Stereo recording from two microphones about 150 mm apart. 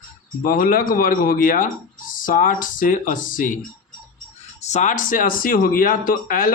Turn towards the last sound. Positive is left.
turn(degrees=70)  # may be behind; listen again after turning